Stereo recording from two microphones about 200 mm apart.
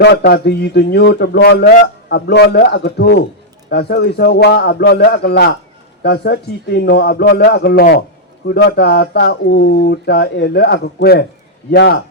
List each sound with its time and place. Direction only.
0.0 s a man's voice: 60° left (ahead or behind)